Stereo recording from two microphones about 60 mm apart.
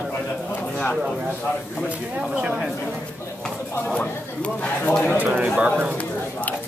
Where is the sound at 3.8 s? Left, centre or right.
Centre.